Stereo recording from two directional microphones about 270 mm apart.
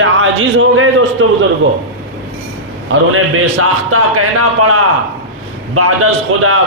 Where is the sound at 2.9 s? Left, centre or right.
Right.